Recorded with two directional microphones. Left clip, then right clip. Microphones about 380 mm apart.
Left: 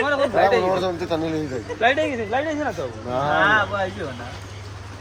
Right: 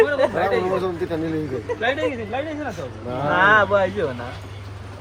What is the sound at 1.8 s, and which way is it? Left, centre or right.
Speech, left.